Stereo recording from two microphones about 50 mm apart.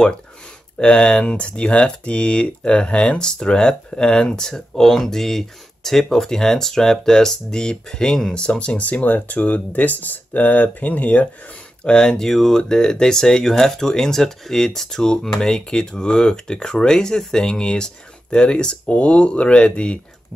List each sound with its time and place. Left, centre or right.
0.7 s speech: centre
11.8 s speech: centre